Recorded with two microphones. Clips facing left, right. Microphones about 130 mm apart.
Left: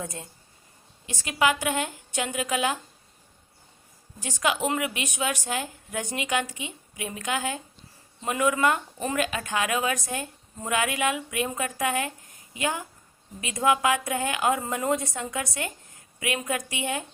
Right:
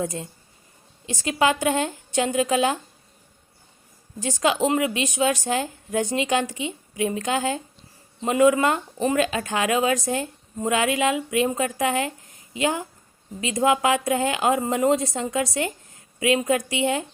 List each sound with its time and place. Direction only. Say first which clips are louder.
0.0 s a woman's voice: right 8 dB; 20° right (ahead or behind)
4.4 s a woman's voice: right 5 dB; 25° right (ahead or behind)
5.5 s a woman's voice: right 6 dB; 30° right (ahead or behind)